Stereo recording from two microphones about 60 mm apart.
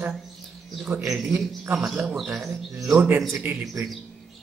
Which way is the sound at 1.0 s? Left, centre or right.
Centre.